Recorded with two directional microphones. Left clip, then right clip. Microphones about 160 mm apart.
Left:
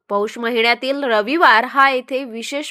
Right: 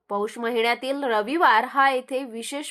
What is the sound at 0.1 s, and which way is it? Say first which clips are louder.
A woman's voice: left 6 dB; 25° left (ahead or behind).